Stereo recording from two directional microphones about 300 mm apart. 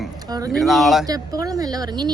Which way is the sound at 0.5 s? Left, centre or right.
Centre.